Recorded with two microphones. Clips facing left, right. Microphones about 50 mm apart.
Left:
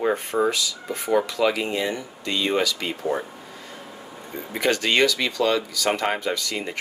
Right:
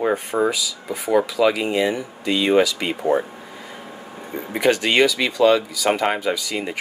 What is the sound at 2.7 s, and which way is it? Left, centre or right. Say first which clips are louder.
Speech: right 6 dB; right.